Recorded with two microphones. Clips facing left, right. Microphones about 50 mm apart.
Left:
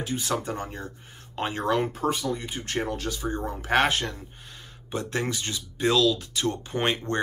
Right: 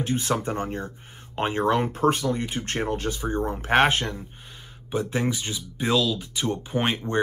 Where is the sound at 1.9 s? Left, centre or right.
Right.